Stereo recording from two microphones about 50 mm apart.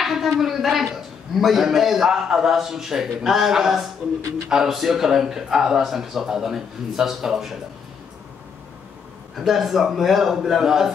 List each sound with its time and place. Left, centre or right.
0.0 s a man's voice: centre
9.4 s a man's voice: centre